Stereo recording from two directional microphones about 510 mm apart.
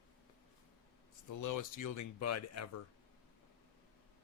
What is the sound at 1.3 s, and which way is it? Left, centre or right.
Speech, left.